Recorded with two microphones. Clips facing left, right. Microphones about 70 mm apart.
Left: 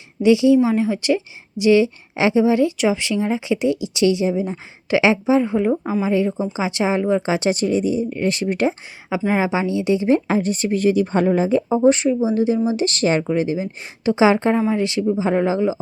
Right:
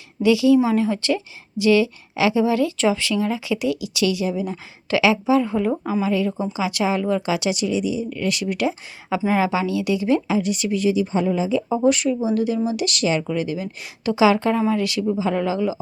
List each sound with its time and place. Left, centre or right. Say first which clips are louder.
0.2 s speech: left 2 dB; left
9.3 s speech: left 1 dB; left
10.2 s speech: left 2 dB; left
11.7 s speech: left 3 dB; left